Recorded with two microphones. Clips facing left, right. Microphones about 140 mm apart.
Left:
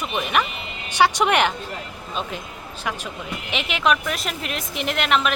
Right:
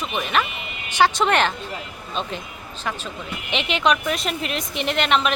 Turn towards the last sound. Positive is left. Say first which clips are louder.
# right 1 dB
turn(degrees=5)  # may be behind; listen again after turning